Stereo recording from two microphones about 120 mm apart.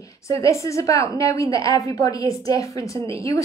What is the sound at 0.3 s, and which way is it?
Speech, 25° left (ahead or behind).